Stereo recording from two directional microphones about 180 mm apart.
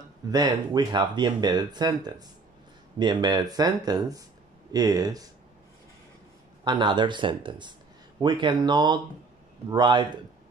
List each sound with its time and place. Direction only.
0.3 s speech: 20° right (ahead or behind)
6.6 s speech: 25° right (ahead or behind)